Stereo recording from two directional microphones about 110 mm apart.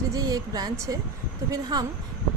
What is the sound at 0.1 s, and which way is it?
Speech, 35° right (ahead or behind).